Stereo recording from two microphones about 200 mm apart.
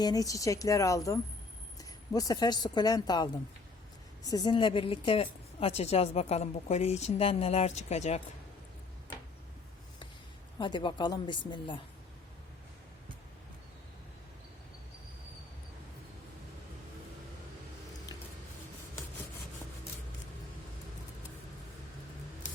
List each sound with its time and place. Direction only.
0.0 s a woman's voice: 20° left (ahead or behind); by 8.2 s 35° left (ahead or behind)
10.6 s speech: 25° left (ahead or behind)